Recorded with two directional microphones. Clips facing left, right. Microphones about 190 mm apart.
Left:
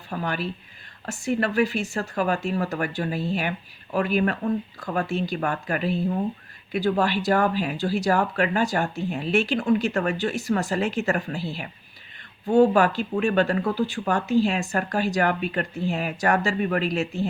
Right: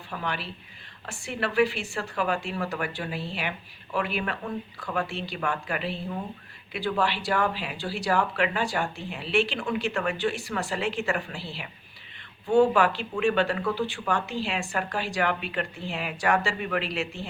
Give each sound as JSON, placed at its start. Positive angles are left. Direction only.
{"t": 0.1, "sound": "speech", "side_deg": 45}